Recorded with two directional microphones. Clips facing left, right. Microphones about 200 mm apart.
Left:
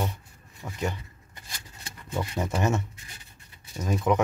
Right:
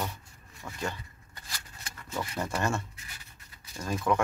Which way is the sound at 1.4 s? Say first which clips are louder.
Left 1 dB; 25° left (ahead or behind).